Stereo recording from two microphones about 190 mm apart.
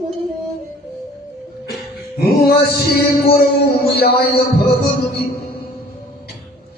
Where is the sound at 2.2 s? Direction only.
55° left (ahead or behind).